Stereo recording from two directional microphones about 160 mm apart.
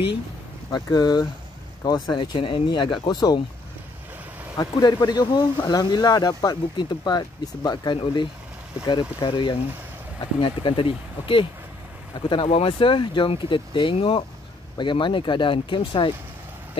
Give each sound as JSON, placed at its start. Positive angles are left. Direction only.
{"t": 0.7, "sound": "speech", "side_deg": 25}
{"t": 4.6, "sound": "speech", "side_deg": 25}